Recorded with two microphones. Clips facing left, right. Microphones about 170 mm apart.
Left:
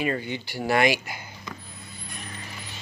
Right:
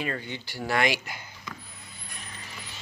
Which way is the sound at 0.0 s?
10° left (ahead or behind).